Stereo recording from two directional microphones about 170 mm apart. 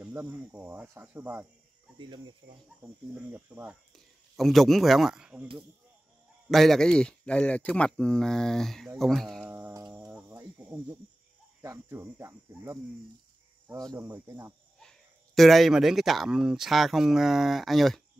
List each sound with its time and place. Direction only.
0.0 s speech: 15° right (ahead or behind)
2.0 s speech: 25° right (ahead or behind)
3.3 s speech: 10° right (ahead or behind)
3.9 s speech: centre (ahead or behind)
6.5 s speech: centre (ahead or behind)
9.4 s insect: 10° right (ahead or behind)
9.9 s a sound: 15° right (ahead or behind)
11.6 s speech: 15° right (ahead or behind)
13.9 s speech: 15° right (ahead or behind)
14.8 s speech: centre (ahead or behind)